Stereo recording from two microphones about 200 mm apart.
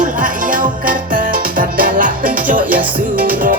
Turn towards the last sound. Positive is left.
turn(degrees=-45)  # may be behind; listen again after turning